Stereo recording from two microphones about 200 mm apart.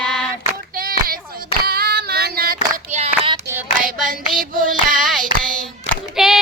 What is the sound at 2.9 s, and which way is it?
Child singing, 35° right (ahead or behind).